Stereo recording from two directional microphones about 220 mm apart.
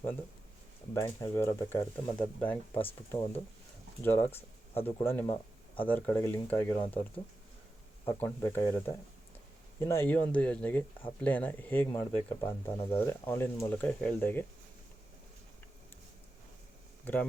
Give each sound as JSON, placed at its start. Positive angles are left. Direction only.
{"t": 0.9, "sound": "speech", "side_deg": 15}